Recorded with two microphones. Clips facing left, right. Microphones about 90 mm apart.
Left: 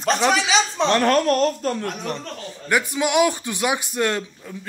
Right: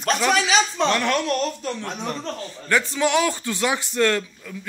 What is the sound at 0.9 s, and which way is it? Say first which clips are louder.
Speech: left 4 dB; 40° left (ahead or behind).